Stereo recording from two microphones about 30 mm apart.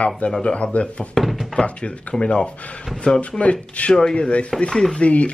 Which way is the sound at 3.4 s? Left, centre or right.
Left.